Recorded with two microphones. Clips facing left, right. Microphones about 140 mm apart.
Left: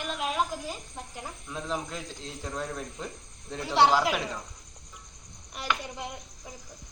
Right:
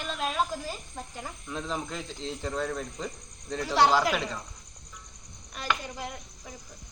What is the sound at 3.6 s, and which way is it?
Child singing, 25° left (ahead or behind).